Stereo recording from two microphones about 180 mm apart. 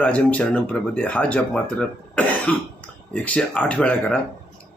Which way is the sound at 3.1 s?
5° left (ahead or behind).